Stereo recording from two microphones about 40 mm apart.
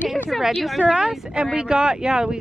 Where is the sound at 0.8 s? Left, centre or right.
Right.